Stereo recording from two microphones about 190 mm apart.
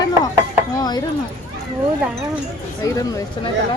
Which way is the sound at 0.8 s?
20° left (ahead or behind).